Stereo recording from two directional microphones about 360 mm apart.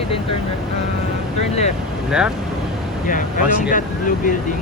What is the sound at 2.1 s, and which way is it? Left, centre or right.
Speech, centre.